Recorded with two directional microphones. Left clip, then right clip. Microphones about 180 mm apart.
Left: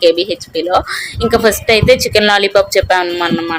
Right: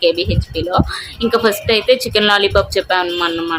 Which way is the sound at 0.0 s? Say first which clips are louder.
Left 4 dB; 20° left (ahead or behind).